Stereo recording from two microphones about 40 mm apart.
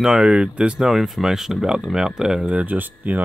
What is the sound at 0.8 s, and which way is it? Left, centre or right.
Speech, centre.